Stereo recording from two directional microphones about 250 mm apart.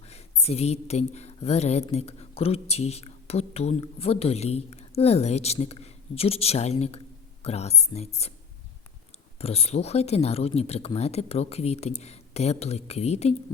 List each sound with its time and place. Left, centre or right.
0.1 s speech: left
9.4 s speech: left